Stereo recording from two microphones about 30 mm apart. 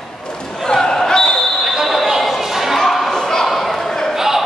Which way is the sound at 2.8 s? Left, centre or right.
Centre.